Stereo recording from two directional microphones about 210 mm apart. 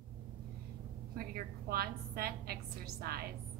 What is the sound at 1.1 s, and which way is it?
A woman's voice, 45° right (ahead or behind).